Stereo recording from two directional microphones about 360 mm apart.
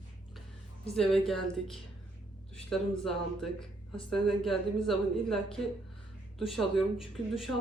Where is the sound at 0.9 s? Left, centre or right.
Centre.